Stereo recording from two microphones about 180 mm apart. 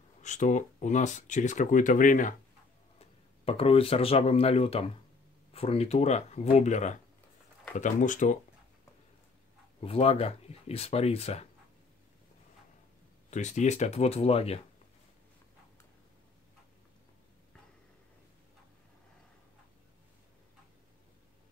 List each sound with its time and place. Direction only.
0.2 s speech: 40° left (ahead or behind)
3.0 s speech: 35° left (ahead or behind)
9.8 s speech: 30° left (ahead or behind)
13.3 s speech: 40° left (ahead or behind)